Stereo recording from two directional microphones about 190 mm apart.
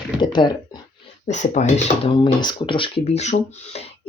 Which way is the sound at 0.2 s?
25° left (ahead or behind).